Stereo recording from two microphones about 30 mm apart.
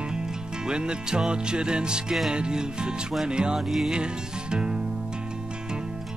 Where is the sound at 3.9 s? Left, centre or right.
Right.